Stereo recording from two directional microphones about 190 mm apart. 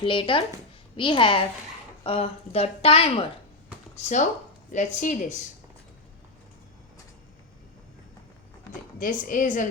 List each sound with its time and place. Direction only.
0.0 s a woman's voice: 25° left (ahead or behind)
9.0 s a woman's voice: 45° left (ahead or behind)